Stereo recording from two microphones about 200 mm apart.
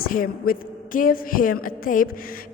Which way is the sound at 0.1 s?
45° left (ahead or behind).